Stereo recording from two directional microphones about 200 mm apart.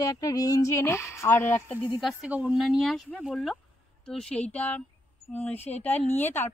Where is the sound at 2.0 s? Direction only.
Centre (ahead or behind).